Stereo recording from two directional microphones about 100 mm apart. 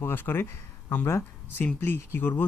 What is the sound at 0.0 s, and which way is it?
Speech, 20° left (ahead or behind).